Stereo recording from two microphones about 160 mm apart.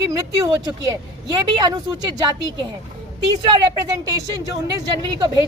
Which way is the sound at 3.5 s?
25° right (ahead or behind).